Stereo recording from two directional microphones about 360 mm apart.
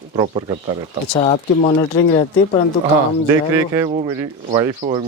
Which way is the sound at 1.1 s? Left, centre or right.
Centre.